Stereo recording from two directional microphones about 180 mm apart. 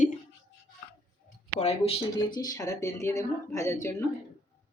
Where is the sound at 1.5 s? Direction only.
35° left (ahead or behind).